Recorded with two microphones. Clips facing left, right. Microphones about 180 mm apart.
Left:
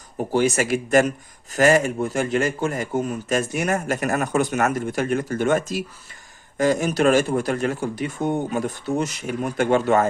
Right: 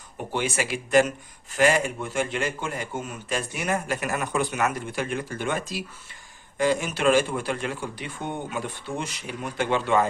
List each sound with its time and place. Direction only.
0.3 s speech: 40° left (ahead or behind)